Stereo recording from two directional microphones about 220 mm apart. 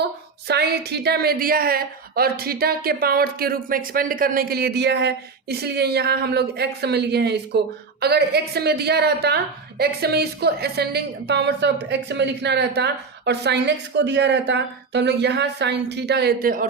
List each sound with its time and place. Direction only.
0.0 s a woman's voice: 45° right (ahead or behind)